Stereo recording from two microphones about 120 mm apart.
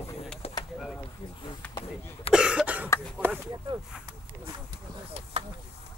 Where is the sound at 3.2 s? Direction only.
20° right (ahead or behind).